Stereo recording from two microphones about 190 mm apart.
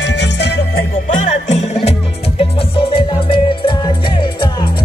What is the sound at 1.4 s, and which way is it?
Music, 35° left (ahead or behind).